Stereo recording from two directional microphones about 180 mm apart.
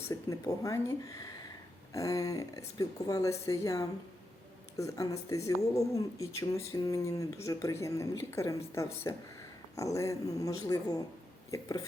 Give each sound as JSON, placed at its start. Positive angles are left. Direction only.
{"t": 0.1, "sound": "a woman's voice", "side_deg": 20}